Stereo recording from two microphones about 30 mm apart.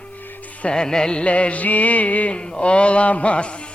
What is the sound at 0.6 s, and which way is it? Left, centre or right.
Music, left.